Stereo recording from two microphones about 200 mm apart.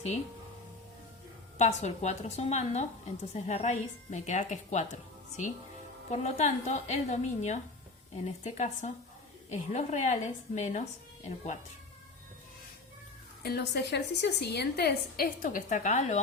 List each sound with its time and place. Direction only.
1.5 s a woman's voice: 35° left (ahead or behind)
13.4 s a woman's voice: 55° left (ahead or behind); by 16.1 s 35° left (ahead or behind)